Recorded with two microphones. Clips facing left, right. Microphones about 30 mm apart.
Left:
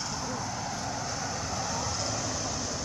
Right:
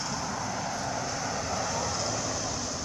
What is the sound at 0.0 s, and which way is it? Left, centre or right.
Vehicle, centre.